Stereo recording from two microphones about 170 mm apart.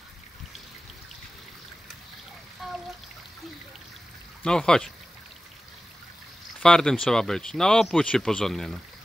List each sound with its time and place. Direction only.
2.6 s trickle: centre (ahead or behind)
4.4 s speech: 5° left (ahead or behind)
6.6 s speech: 5° left (ahead or behind)